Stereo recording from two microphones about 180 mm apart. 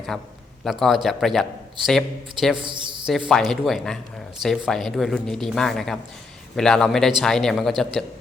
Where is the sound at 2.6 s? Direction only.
25° right (ahead or behind).